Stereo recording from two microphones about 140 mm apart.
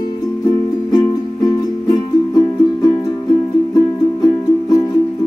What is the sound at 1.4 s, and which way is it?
Music, 30° left (ahead or behind).